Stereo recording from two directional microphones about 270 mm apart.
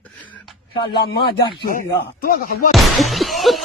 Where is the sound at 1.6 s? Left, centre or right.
Left.